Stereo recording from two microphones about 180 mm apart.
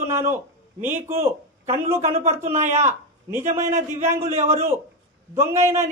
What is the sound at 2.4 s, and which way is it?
Speech, 40° right (ahead or behind).